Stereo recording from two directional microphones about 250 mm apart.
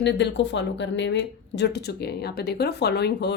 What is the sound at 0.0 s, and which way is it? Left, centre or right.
Speech, left.